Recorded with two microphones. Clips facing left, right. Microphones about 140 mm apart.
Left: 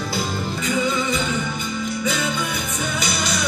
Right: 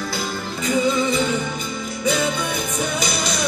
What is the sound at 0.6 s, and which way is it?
Music, 35° right (ahead or behind).